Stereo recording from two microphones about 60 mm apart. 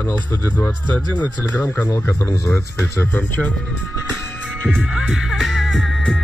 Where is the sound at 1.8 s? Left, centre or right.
Left.